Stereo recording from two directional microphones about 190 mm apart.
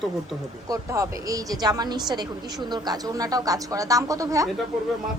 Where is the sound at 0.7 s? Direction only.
15° right (ahead or behind).